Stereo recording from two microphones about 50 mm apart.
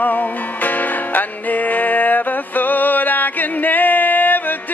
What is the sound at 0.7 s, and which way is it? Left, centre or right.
Music, left.